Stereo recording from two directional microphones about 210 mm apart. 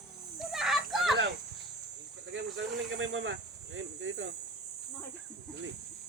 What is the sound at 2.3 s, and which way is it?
Snake, 65° right (ahead or behind).